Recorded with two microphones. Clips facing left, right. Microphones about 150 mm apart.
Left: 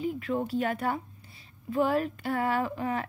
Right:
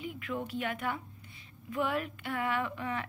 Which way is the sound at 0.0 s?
35° left (ahead or behind).